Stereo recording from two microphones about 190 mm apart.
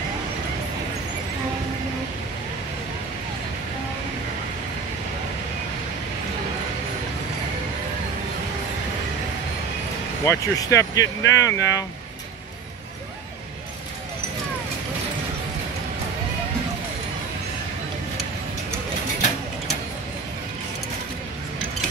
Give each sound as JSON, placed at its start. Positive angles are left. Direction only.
{"t": 10.2, "sound": "speech", "side_deg": 15}